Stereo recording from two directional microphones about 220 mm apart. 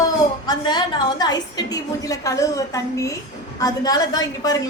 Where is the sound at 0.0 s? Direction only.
20° left (ahead or behind).